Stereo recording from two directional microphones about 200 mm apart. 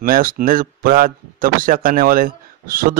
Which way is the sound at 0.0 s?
45° right (ahead or behind).